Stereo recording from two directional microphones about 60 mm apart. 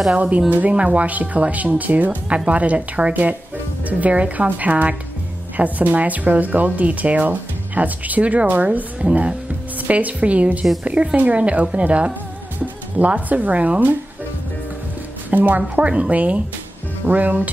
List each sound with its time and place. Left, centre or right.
0.1 s speech: right
15.2 s speech: right